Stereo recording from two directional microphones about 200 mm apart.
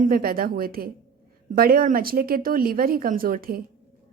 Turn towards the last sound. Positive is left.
turn(degrees=-45)  # may be behind; listen again after turning